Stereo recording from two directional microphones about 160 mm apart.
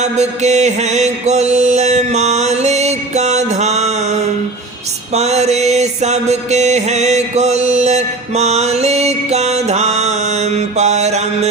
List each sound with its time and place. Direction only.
0.0 s music: 45° right (ahead or behind)
5.1 s mantra: 40° right (ahead or behind)